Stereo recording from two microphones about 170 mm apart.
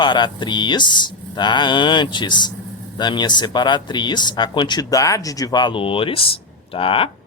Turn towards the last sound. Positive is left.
turn(degrees=30)  # may be behind; listen again after turning